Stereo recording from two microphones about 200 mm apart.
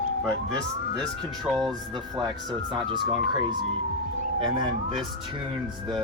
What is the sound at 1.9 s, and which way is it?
Speech, 20° right (ahead or behind).